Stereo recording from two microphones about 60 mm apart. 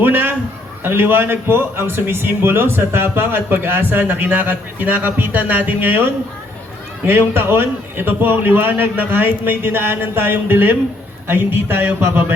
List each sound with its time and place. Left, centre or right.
0.0 s a sound: right
0.9 s a man's voice: right
7.0 s a man's voice: right